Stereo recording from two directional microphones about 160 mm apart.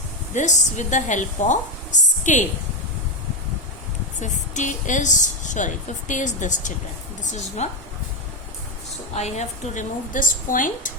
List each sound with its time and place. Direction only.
0.3 s a woman's voice: 50° left (ahead or behind)
4.2 s a woman's voice: 50° left (ahead or behind)
9.1 s a woman's voice: 45° left (ahead or behind)